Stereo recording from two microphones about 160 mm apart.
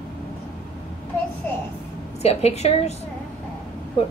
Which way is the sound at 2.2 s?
40° left (ahead or behind).